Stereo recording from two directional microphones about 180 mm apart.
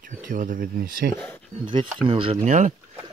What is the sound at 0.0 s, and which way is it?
Speech, 50° right (ahead or behind).